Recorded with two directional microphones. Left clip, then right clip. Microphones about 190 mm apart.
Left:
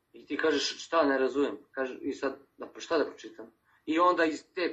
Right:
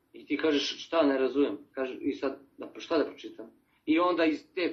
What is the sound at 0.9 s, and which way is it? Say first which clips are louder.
Speech: even; centre (ahead or behind).